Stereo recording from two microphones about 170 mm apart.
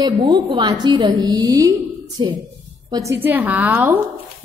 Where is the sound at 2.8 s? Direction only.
20° right (ahead or behind).